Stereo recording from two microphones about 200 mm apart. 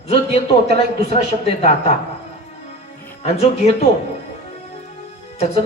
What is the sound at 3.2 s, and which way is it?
Speech, 30° left (ahead or behind).